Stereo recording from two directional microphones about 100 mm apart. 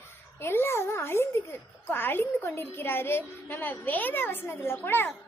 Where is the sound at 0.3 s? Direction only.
25° left (ahead or behind).